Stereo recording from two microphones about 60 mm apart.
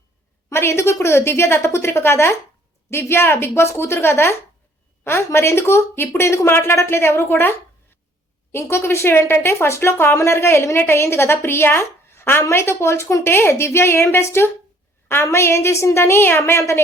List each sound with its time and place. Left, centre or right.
0.5 s a woman's voice: left
8.8 s a woman's voice: left